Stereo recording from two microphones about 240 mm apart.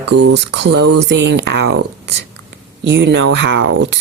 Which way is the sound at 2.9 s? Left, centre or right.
Right.